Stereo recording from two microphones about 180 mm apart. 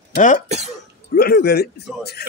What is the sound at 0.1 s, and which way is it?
Speech, 45° left (ahead or behind).